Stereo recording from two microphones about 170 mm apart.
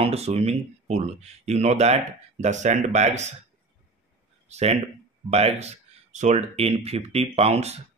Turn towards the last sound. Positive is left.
turn(degrees=-40)  # may be behind; listen again after turning